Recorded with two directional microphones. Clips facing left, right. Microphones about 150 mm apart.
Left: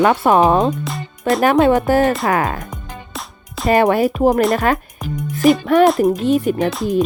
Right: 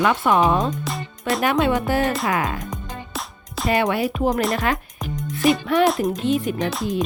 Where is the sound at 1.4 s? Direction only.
45° left (ahead or behind).